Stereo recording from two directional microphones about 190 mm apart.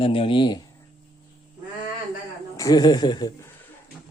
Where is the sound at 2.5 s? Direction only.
20° left (ahead or behind).